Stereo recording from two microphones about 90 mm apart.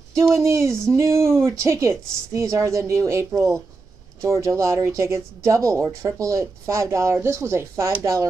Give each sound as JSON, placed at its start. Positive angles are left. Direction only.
{"t": 0.3, "sound": "speech", "side_deg": -30}